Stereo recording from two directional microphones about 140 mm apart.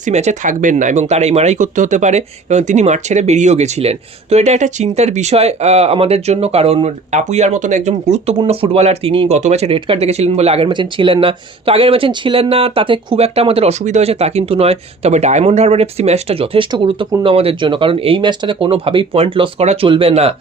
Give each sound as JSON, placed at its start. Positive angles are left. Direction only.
{"t": 0.0, "sound": "speech", "side_deg": -55}